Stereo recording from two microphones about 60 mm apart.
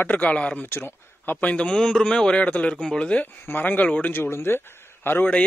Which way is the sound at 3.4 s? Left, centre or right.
Left.